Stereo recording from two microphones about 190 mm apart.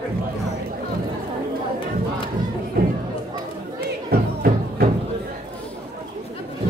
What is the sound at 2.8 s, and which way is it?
Chatter, 50° right (ahead or behind).